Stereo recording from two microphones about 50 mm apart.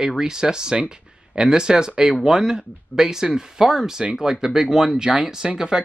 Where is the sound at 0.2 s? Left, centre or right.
Centre.